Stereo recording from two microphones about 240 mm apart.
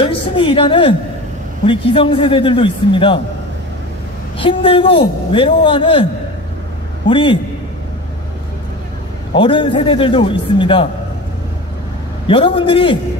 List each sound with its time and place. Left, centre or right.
0.0 s a woman's voice: left
4.4 s a man's voice: left
7.1 s a man's voice: left
9.3 s a man's voice: left
12.3 s a man's voice: centre